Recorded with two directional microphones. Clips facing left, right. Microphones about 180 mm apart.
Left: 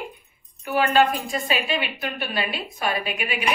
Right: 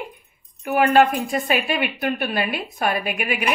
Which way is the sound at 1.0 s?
60° right (ahead or behind).